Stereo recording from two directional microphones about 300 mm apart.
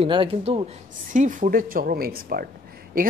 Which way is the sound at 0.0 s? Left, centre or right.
Centre.